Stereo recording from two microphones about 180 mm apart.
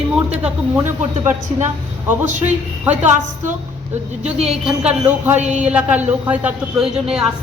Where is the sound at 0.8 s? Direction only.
15° right (ahead or behind).